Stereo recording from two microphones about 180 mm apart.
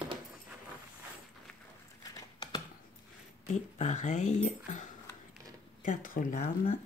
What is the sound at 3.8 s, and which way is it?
Speech, 40° left (ahead or behind).